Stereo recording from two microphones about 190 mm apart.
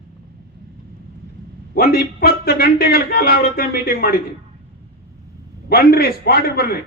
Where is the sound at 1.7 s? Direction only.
55° left (ahead or behind).